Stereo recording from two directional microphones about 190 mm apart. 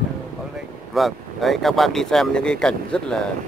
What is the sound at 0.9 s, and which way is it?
Speech, centre (ahead or behind).